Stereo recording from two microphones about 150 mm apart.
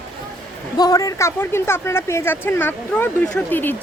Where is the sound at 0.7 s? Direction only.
25° left (ahead or behind).